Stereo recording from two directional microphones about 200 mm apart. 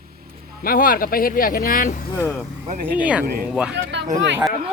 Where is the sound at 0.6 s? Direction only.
45° left (ahead or behind).